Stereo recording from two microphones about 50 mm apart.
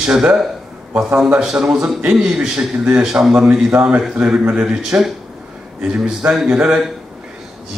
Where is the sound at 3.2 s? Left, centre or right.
Centre.